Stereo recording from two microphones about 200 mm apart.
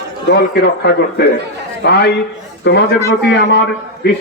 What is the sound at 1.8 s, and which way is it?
A man's voice, 55° left (ahead or behind).